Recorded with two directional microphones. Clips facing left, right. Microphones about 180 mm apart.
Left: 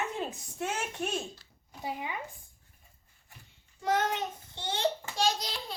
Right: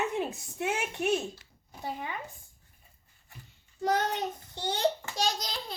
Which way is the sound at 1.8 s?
10° left (ahead or behind).